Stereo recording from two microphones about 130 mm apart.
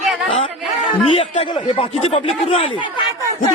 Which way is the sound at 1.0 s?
45° left (ahead or behind).